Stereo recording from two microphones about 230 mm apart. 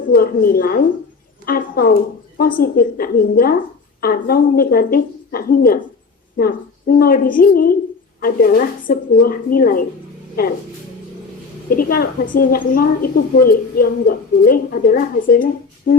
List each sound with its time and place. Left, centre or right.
0.1 s a woman's voice: left
11.7 s a woman's voice: left